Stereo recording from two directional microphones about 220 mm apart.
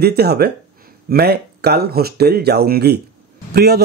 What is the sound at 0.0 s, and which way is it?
A man's voice, 45° right (ahead or behind).